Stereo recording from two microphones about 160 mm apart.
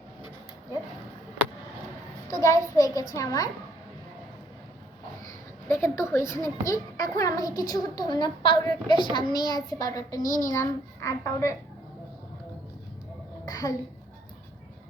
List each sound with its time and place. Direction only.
2.4 s a child's voice: 20° left (ahead or behind)
5.6 s a child's voice: 15° left (ahead or behind)
13.4 s a sound: 20° left (ahead or behind)